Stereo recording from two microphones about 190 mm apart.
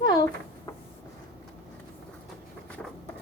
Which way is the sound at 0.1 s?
20° left (ahead or behind).